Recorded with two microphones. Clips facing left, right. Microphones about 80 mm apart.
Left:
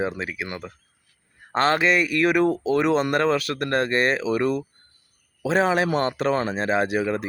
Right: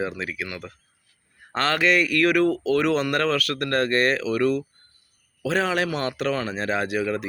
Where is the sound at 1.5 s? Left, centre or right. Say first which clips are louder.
Left 2 dB; left.